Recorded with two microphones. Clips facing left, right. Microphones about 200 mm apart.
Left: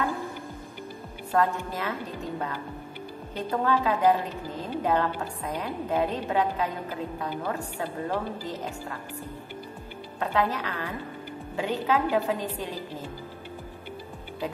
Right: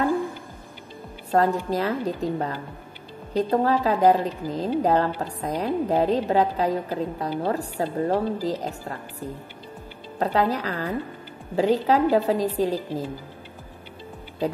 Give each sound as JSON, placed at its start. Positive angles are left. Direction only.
{"t": 1.3, "sound": "a woman's voice", "side_deg": -35}
{"t": 10.1, "sound": "a woman's voice", "side_deg": -35}